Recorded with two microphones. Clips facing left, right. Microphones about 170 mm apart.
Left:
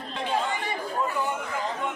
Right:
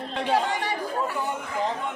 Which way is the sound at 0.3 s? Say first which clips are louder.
Right 3 dB; 75° right (ahead or behind).